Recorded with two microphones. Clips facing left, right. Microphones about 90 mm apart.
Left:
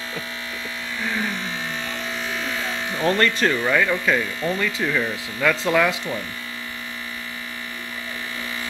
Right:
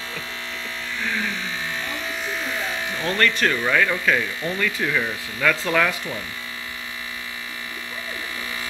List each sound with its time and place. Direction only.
1.0 s speech: 15° left (ahead or behind)
3.0 s speech: 25° left (ahead or behind)
3.6 s speech: 10° left (ahead or behind)